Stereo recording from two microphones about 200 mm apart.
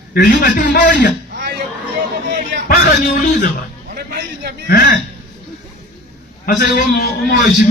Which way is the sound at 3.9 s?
50° right (ahead or behind).